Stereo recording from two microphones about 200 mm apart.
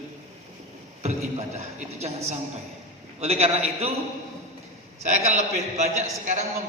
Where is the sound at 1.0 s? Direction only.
35° right (ahead or behind).